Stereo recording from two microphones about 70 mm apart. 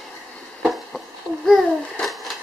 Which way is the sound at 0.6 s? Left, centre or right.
Centre.